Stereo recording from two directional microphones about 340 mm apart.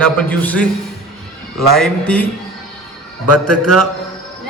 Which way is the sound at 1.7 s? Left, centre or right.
Centre.